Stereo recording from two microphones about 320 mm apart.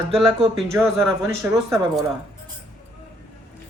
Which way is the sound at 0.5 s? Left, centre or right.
Centre.